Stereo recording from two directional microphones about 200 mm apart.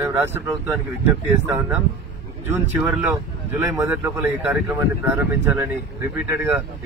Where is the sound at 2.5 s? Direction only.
5° right (ahead or behind).